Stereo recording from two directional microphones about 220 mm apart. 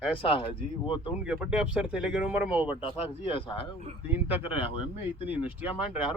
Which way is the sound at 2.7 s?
20° left (ahead or behind).